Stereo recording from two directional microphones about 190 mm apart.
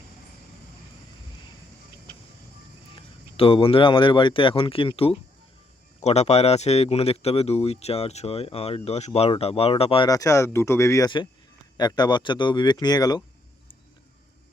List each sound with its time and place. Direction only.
2.9 s speech: 30° left (ahead or behind)
10.1 s speech: 15° left (ahead or behind)